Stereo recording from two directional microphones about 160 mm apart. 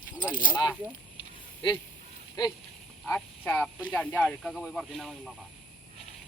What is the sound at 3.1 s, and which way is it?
Speech, 5° left (ahead or behind).